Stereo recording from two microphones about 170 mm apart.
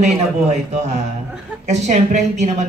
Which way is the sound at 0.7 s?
40° right (ahead or behind).